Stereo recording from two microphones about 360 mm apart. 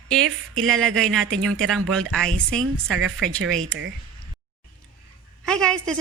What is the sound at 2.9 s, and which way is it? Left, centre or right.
Speech, right.